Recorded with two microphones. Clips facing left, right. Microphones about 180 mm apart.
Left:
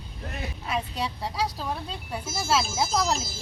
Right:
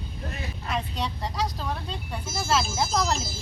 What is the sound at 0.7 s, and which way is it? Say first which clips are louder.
Vehicle: even; 5° left (ahead or behind).